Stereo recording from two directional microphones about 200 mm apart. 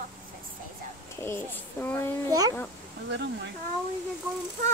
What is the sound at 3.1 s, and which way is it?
Speech, 60° right (ahead or behind).